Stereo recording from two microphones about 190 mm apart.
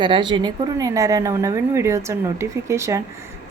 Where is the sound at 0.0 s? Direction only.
25° right (ahead or behind).